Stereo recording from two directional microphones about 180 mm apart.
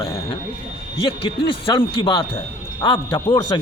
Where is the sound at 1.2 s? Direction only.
30° left (ahead or behind).